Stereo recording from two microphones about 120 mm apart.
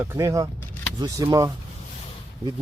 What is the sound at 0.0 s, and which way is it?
Speech, 25° right (ahead or behind).